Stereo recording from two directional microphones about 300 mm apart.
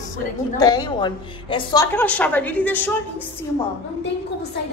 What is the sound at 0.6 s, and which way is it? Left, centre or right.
A woman's voice, centre.